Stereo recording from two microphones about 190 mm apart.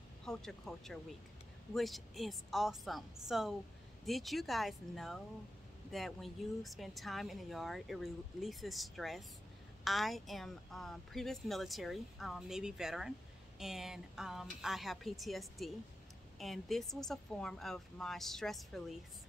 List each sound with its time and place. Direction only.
0.2 s speech: 5° left (ahead or behind)